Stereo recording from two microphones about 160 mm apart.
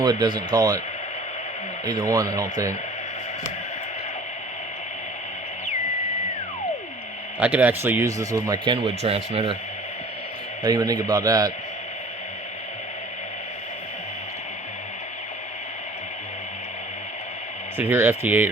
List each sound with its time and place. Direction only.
0.0 s speech: 25° right (ahead or behind)
1.8 s speech: 25° right (ahead or behind)
7.3 s speech: 10° right (ahead or behind); by 9.6 s 35° right (ahead or behind)
10.6 s speech: 25° right (ahead or behind)
17.7 s speech: 15° right (ahead or behind)